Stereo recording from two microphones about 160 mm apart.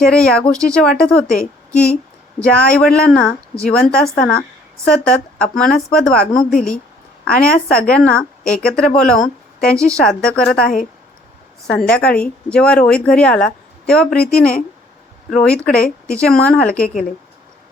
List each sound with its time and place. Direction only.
0.0 s a woman's voice: 5° left (ahead or behind)
6.3 s a woman's voice: 60° left (ahead or behind)
7.3 s speech: 5° left (ahead or behind)
11.9 s speech: 5° left (ahead or behind)
16.8 s a woman's voice: 55° left (ahead or behind)